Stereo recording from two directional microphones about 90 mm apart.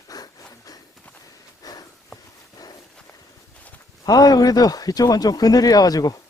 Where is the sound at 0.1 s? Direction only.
40° left (ahead or behind).